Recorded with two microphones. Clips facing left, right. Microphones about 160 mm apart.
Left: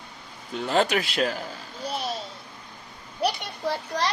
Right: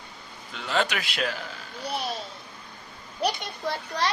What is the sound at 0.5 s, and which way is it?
Speech, 40° left (ahead or behind).